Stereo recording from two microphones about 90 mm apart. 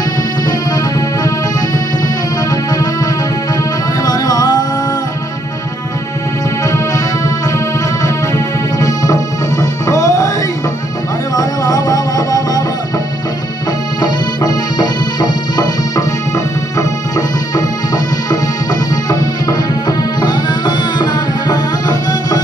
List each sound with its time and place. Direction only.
4.0 s music: 45° left (ahead or behind)
8.7 s music: 40° left (ahead or behind)
11.3 s music: 40° left (ahead or behind)
14.0 s music: 50° left (ahead or behind)
17.6 s music: 45° left (ahead or behind)